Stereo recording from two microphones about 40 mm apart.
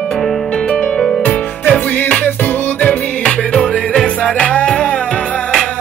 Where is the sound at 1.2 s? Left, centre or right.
Left.